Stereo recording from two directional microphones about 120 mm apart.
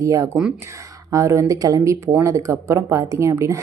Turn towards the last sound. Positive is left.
turn(degrees=-25)  # may be behind; listen again after turning